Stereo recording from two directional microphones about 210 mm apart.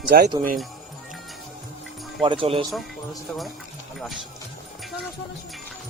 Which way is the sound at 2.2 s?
25° right (ahead or behind).